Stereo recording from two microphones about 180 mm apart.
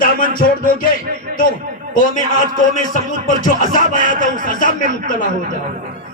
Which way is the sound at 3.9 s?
45° left (ahead or behind).